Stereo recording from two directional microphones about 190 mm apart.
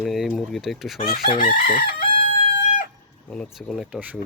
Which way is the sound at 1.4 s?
45° left (ahead or behind).